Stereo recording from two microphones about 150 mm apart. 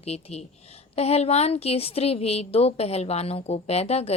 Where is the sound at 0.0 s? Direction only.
45° left (ahead or behind).